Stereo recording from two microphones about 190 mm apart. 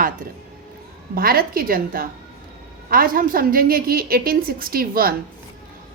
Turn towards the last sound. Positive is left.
turn(degrees=-50)  # may be behind; listen again after turning